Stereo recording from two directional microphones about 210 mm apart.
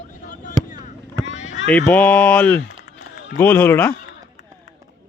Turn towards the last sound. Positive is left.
turn(degrees=10)  # may be behind; listen again after turning